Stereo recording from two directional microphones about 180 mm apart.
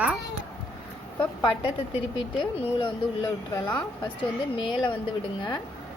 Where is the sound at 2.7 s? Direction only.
25° left (ahead or behind).